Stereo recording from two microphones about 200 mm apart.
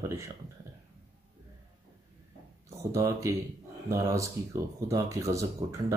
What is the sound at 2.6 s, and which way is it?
Speech, 15° right (ahead or behind).